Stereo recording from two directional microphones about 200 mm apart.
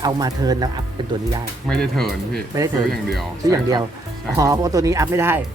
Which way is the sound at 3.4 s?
20° right (ahead or behind).